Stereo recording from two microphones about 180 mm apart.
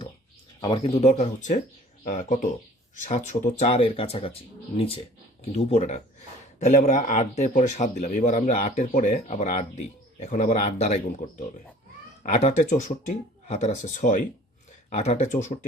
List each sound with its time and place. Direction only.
0.6 s speech: 30° left (ahead or behind)
5.5 s speech: 35° left (ahead or behind)